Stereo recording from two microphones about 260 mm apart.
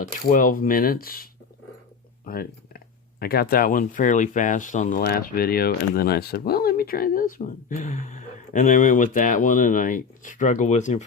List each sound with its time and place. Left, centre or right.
0.3 s speech: left